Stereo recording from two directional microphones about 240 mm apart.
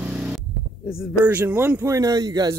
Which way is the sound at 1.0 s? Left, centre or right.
Centre.